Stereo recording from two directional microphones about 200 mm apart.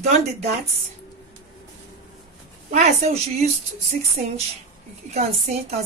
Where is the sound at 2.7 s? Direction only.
35° right (ahead or behind).